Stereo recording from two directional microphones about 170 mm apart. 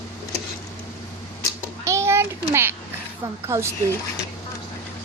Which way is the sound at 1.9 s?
15° right (ahead or behind).